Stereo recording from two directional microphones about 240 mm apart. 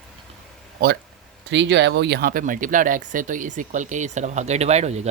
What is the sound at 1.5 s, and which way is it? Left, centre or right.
Speech, right.